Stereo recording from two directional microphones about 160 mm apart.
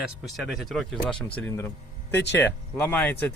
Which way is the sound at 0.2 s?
Centre (ahead or behind).